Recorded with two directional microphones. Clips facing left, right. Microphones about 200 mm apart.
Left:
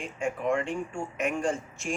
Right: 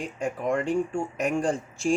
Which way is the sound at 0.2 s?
40° right (ahead or behind).